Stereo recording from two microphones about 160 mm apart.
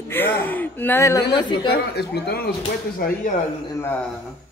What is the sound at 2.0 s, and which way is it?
Speech, 90° left.